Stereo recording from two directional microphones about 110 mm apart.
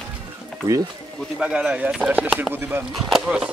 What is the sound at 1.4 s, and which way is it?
Speech, 5° right (ahead or behind).